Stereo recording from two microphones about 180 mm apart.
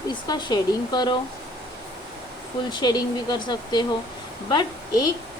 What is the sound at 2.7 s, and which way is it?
A woman's voice, 25° left (ahead or behind).